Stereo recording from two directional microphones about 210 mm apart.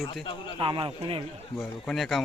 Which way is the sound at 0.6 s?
25° right (ahead or behind).